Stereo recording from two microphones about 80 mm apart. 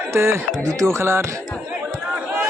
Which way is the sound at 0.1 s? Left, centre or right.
Right.